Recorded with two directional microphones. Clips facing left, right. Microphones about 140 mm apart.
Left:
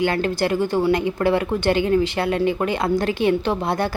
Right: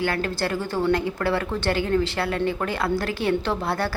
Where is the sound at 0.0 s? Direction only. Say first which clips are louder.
Left 5 dB; 20° left (ahead or behind).